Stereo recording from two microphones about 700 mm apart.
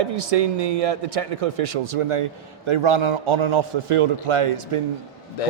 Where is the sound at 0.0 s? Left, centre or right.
Right.